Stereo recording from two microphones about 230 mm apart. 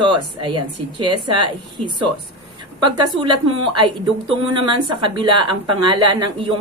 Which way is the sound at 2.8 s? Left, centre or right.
Centre.